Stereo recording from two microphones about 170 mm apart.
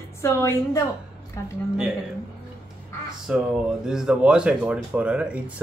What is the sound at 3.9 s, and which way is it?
A man's voice, 5° right (ahead or behind).